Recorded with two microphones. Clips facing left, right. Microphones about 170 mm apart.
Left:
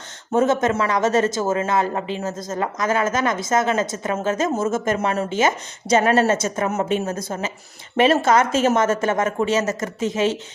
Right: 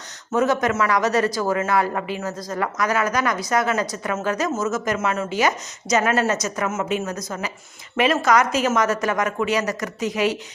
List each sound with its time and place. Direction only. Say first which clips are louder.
0.3 s speech: left 2 dB; 25° left (ahead or behind)